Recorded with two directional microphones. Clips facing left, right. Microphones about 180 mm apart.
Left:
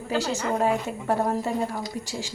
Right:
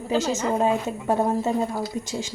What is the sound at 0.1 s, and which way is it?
Speech, 20° right (ahead or behind).